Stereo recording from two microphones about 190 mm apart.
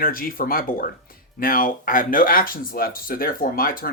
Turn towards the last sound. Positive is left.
turn(degrees=50)  # may be behind; listen again after turning